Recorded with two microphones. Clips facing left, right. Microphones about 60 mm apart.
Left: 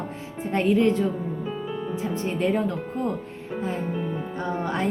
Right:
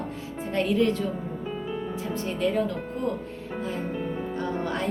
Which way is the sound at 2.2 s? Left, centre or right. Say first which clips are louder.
Left 2 dB; left.